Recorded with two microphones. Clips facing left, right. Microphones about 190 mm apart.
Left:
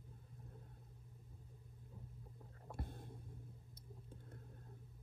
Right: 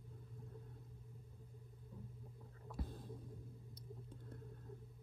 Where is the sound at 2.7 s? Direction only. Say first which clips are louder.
Right 1 dB; 55° left (ahead or behind).